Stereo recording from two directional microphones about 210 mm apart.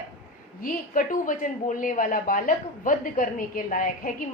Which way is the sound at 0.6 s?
40° left (ahead or behind).